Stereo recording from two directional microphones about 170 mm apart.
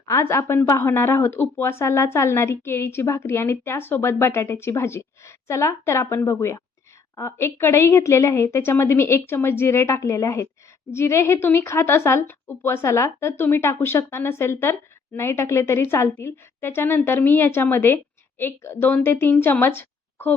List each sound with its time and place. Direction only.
0.0 s a woman's voice: 15° left (ahead or behind)